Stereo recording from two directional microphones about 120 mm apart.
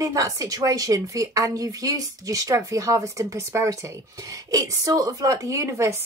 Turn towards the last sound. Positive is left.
turn(degrees=-25)  # may be behind; listen again after turning